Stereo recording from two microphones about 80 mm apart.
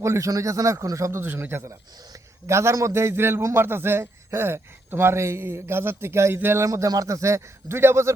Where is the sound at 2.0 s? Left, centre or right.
Right.